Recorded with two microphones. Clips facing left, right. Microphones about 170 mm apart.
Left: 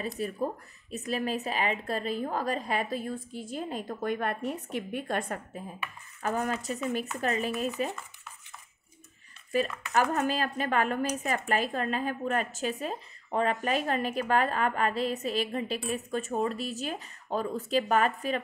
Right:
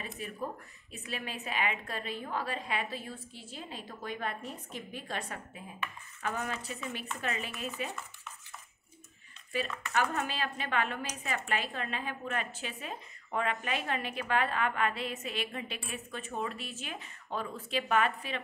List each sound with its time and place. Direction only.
0.0 s a woman's voice: 40° left (ahead or behind)
9.5 s a woman's voice: 40° left (ahead or behind)